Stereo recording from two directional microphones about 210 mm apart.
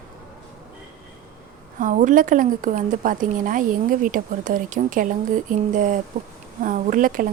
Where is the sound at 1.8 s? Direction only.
35° right (ahead or behind).